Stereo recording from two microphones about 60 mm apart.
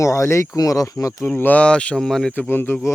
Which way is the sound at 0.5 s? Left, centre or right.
Left.